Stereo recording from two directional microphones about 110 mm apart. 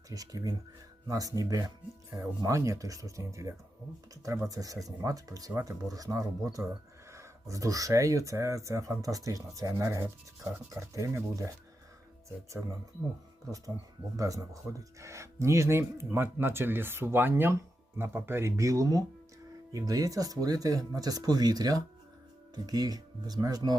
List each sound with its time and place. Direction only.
0.1 s speech: 35° right (ahead or behind)
14.2 s speech: 30° right (ahead or behind)